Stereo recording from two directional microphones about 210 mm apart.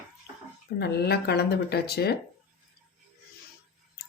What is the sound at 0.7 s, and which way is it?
Speech, 50° left (ahead or behind).